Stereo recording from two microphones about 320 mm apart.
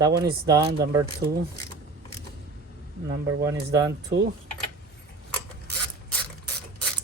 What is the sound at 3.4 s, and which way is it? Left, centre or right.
Speech, centre.